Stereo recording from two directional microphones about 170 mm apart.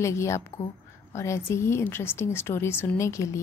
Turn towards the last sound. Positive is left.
turn(degrees=15)  # may be behind; listen again after turning